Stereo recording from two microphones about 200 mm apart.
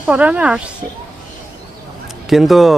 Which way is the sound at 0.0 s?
5° right (ahead or behind).